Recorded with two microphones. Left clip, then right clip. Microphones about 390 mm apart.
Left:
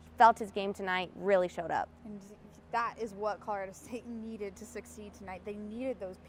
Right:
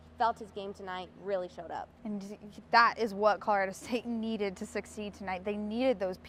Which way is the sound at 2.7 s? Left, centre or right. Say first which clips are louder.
Right 9 dB; right.